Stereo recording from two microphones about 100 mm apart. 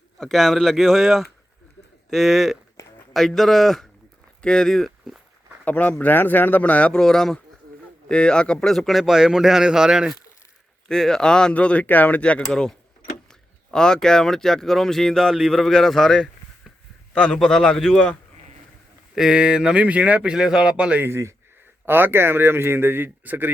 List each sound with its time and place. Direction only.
0.2 s speech: centre (ahead or behind)
5.6 s speech: 15° left (ahead or behind); by 10.2 s 5° right (ahead or behind)
10.8 s speech: 5° left (ahead or behind)
19.1 s speech: 5° right (ahead or behind)
21.0 s speech: 25° right (ahead or behind)